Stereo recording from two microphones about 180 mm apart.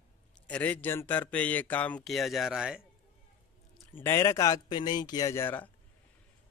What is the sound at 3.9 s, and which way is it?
A man's voice, 15° left (ahead or behind).